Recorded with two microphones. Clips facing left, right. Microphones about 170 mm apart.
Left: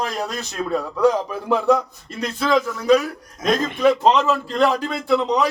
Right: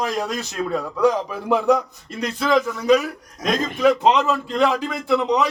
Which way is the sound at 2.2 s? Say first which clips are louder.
Even; 15° right (ahead or behind).